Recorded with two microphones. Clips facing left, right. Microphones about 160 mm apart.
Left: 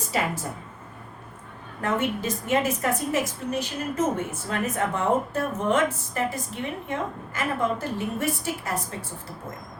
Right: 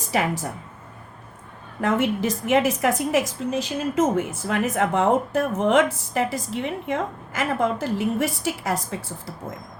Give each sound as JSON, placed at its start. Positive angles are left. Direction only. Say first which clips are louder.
{"t": 1.8, "sound": "a woman's voice", "louder": "right 4 dB", "side_deg": -90}